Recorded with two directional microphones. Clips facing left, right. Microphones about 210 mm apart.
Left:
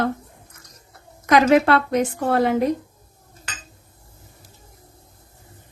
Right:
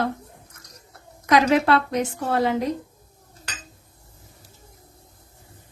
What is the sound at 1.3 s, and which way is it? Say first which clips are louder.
A woman's voice: left 3 dB; 55° left (ahead or behind).